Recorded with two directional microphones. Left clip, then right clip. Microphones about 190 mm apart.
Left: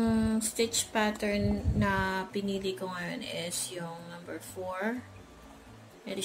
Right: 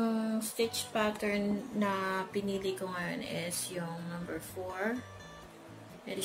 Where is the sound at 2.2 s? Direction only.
5° left (ahead or behind).